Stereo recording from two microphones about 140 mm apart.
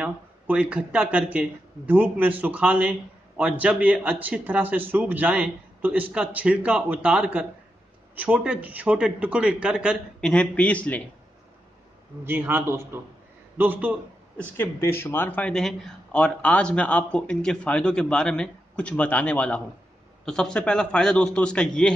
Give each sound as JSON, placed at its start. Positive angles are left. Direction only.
{"t": 0.0, "sound": "speech", "side_deg": -10}
{"t": 10.2, "sound": "speech", "side_deg": 5}
{"t": 12.3, "sound": "speech", "side_deg": -15}
{"t": 14.3, "sound": "speech", "side_deg": 10}